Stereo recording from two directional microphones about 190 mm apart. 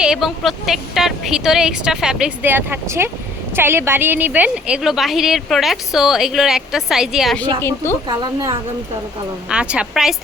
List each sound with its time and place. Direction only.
0.0 s a woman's voice: 5° right (ahead or behind)
8.0 s speech: 20° right (ahead or behind)
9.5 s a woman's voice: 5° right (ahead or behind)